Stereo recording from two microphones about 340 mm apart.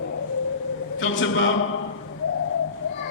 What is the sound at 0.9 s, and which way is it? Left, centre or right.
Speech, left.